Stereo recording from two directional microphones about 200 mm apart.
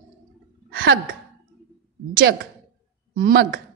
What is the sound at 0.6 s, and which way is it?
Sigh, 50° right (ahead or behind).